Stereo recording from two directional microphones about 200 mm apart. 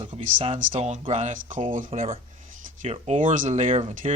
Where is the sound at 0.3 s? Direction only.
30° right (ahead or behind).